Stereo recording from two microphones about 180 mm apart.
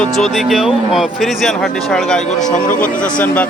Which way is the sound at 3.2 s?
10° left (ahead or behind).